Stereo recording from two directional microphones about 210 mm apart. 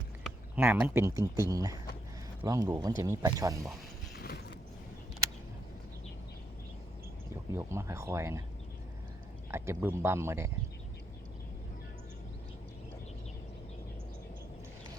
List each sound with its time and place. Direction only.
0.3 s speech: 10° right (ahead or behind)
4.1 s a sound: 50° left (ahead or behind)
7.5 s speech: 15° right (ahead or behind)
9.5 s speech: 10° right (ahead or behind)